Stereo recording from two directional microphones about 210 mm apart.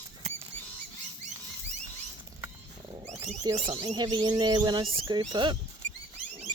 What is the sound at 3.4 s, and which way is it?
Speech, 20° right (ahead or behind).